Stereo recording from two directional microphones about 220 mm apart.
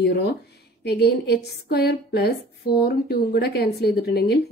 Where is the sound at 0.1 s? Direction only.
50° left (ahead or behind).